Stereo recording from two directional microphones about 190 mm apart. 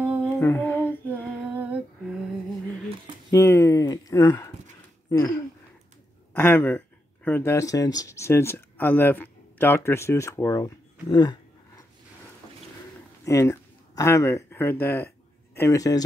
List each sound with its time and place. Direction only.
0.0 s lullaby: 5° right (ahead or behind)
0.4 s lullaby: 15° left (ahead or behind)
1.6 s humming: 5° right (ahead or behind)
3.3 s a sound: 15° left (ahead or behind)
6.3 s speech: 10° left (ahead or behind)
13.2 s a man's voice: 15° left (ahead or behind)